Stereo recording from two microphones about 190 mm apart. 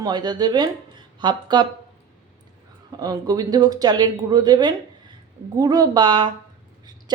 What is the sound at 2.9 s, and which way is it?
A woman's voice, 20° right (ahead or behind).